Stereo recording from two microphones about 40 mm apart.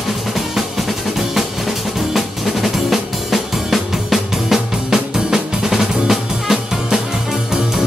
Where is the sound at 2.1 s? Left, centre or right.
Centre.